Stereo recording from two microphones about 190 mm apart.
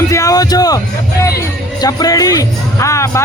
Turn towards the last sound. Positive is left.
turn(degrees=15)  # may be behind; listen again after turning